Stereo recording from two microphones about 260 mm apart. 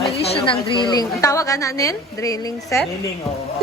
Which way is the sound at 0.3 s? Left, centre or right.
Left.